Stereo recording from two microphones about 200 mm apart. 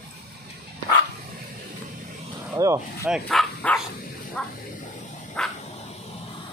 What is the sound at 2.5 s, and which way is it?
Speech, 15° right (ahead or behind).